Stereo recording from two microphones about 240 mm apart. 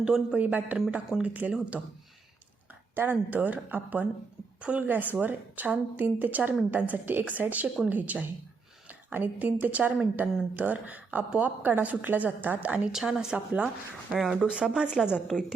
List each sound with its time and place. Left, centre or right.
0.0 s speech: centre
2.9 s a woman's voice: centre